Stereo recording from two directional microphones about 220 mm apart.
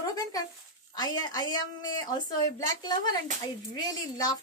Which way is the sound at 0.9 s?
15° left (ahead or behind).